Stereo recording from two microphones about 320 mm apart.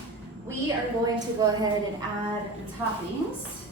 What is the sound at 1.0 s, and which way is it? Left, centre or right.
Speech, centre.